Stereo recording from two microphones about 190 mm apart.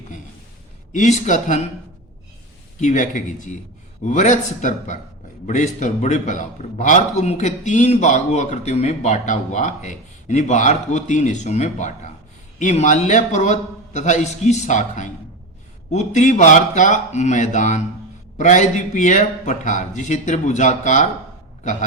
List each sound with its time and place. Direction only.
0.9 s a man's voice: 40° left (ahead or behind)
2.8 s a man's voice: 45° left (ahead or behind)
21.6 s a sound: 40° left (ahead or behind)